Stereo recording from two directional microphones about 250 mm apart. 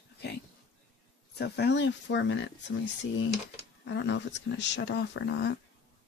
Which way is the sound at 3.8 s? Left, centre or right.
Left.